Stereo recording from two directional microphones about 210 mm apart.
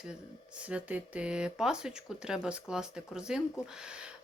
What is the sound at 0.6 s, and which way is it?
Speech, 5° right (ahead or behind).